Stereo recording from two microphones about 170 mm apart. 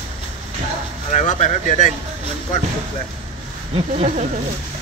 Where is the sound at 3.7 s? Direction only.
35° right (ahead or behind).